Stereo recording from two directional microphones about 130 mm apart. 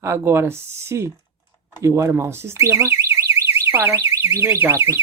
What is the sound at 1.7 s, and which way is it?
Alarm, 20° right (ahead or behind).